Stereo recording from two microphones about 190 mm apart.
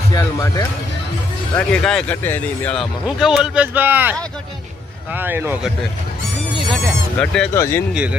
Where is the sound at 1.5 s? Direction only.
5° left (ahead or behind).